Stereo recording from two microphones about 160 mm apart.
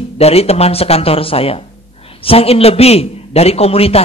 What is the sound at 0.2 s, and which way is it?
A man's voice, 40° left (ahead or behind).